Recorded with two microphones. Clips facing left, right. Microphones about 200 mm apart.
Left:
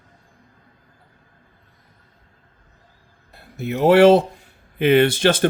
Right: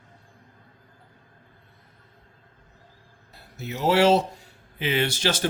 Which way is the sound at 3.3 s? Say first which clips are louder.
Left 9 dB; 55° left (ahead or behind).